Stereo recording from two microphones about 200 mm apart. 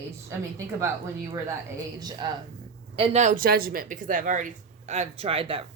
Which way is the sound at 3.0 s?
30° right (ahead or behind).